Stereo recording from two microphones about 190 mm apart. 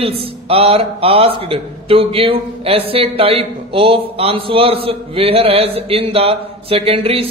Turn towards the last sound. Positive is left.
turn(degrees=-30)  # may be behind; listen again after turning